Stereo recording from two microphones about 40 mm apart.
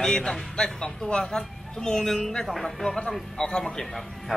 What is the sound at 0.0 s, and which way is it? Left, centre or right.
Speech, centre.